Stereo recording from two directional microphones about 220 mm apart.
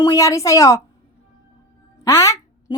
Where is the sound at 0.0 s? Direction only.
15° left (ahead or behind).